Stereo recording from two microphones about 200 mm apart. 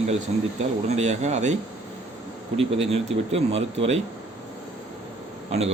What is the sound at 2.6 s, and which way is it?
Speech, 30° right (ahead or behind).